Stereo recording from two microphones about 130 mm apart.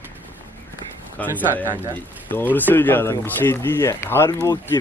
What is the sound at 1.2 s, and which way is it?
Speech, 10° left (ahead or behind).